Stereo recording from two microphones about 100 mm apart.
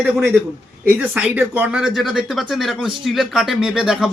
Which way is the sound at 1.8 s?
Centre (ahead or behind).